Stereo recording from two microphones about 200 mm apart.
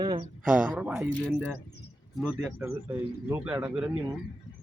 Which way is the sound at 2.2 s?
10° right (ahead or behind).